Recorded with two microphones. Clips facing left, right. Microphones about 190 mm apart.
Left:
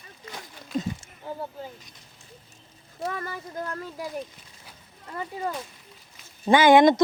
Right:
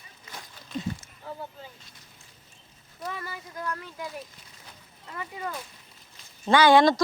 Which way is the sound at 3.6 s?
30° left (ahead or behind).